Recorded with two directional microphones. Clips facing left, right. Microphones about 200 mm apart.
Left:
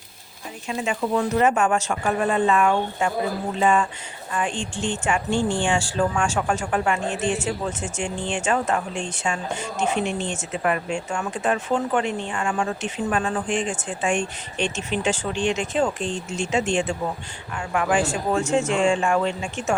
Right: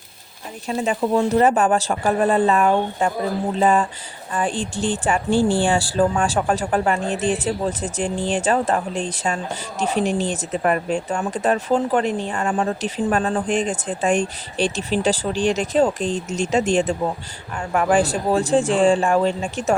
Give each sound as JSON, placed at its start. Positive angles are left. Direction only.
{"t": 0.7, "sound": "speech", "side_deg": -35}